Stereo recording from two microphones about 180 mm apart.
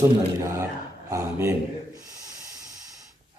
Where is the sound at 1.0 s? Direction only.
15° right (ahead or behind).